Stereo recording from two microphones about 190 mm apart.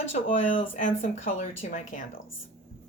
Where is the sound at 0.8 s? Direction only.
40° left (ahead or behind).